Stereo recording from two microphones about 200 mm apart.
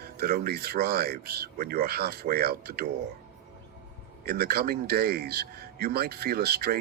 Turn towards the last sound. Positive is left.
turn(degrees=-50)  # may be behind; listen again after turning